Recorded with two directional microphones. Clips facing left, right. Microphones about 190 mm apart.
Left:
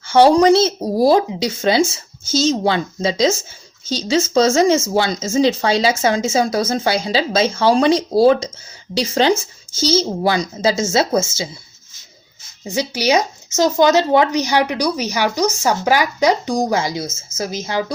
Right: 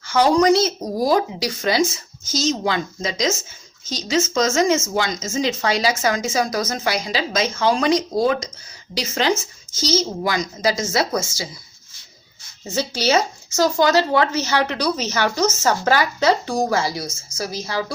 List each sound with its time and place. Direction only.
0.1 s speech: 30° left (ahead or behind)
12.6 s speech: 15° left (ahead or behind)